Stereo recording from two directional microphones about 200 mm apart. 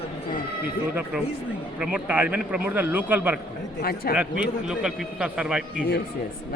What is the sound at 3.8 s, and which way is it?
Speech, 50° left (ahead or behind).